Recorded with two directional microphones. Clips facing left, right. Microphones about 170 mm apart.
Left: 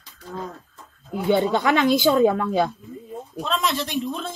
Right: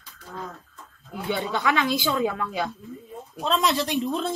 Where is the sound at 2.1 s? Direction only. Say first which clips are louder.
Left 8 dB; 35° left (ahead or behind).